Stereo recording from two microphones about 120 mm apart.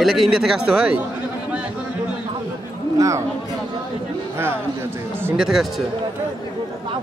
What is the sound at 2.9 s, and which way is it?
Speech, 25° right (ahead or behind).